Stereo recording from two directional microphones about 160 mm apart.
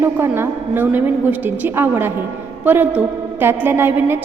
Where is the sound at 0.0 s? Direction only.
15° right (ahead or behind).